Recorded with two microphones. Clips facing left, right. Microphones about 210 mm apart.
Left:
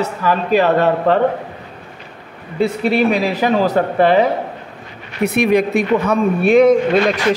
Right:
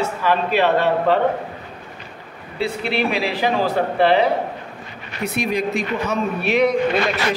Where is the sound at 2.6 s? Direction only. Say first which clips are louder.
Left 7 dB; 45° left (ahead or behind).